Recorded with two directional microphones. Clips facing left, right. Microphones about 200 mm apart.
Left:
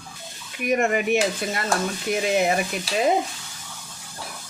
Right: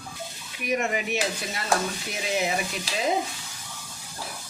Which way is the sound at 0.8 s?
55° left (ahead or behind).